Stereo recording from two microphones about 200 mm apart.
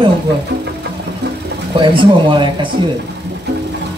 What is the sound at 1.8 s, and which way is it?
Speech, 25° right (ahead or behind).